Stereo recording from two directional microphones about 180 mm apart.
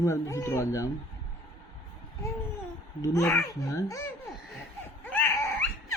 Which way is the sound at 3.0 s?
15° left (ahead or behind).